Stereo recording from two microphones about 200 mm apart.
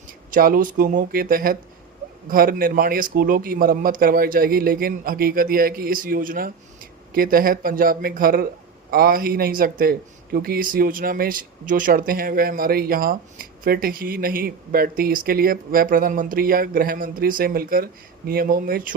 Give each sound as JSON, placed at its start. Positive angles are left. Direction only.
{"t": 0.3, "sound": "speech", "side_deg": -45}